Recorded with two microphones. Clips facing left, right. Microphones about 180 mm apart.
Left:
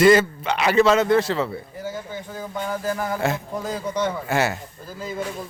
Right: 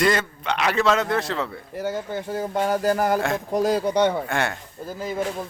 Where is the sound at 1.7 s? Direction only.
65° right (ahead or behind).